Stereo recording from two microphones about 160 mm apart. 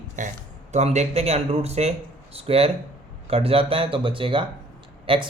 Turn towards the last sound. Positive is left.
turn(degrees=-35)  # may be behind; listen again after turning